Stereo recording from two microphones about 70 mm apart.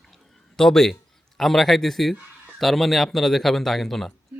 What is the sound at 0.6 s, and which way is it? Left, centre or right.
A man's voice, centre.